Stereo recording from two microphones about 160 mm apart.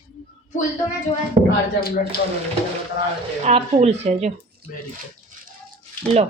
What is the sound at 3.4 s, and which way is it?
Speech, 40° right (ahead or behind).